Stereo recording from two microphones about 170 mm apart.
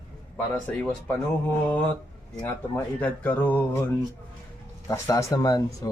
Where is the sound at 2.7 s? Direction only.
10° left (ahead or behind).